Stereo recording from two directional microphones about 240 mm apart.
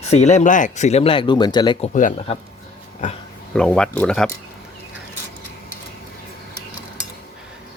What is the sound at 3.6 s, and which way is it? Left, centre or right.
Speech, centre.